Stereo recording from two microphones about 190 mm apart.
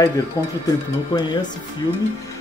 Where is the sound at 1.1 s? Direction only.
25° left (ahead or behind).